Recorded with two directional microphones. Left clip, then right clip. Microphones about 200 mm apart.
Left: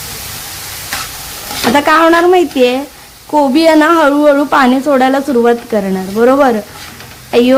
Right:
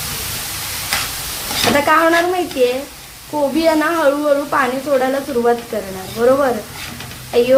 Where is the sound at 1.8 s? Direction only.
50° left (ahead or behind).